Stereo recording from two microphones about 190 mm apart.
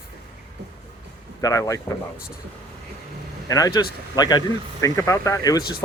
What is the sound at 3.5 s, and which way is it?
Speech, 20° left (ahead or behind).